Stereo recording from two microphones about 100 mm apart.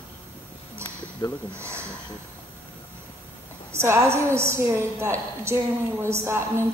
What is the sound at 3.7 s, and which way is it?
A woman's voice, 25° right (ahead or behind).